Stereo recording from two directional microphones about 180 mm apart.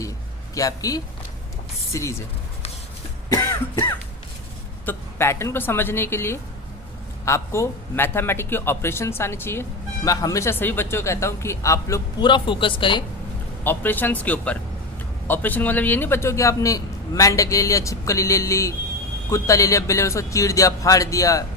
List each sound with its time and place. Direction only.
0.5 s a man's voice: 20° left (ahead or behind)
3.2 s cough: 15° left (ahead or behind)
4.9 s a man's voice: 15° left (ahead or behind)
13.7 s a man's voice: 10° left (ahead or behind)